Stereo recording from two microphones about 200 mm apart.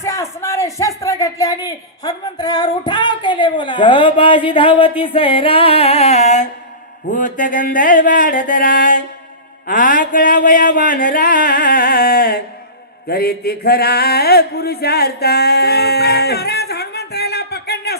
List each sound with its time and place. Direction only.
0.0 s speech: 15° left (ahead or behind); by 17.9 s 55° left (ahead or behind)